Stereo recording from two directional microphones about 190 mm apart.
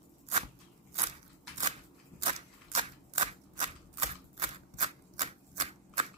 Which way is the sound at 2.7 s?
35° right (ahead or behind).